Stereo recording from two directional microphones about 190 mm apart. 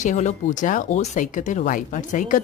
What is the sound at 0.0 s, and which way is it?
Speech, 40° left (ahead or behind).